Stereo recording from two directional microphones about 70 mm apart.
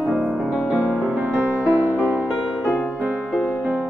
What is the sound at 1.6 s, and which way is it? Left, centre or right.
Music, right.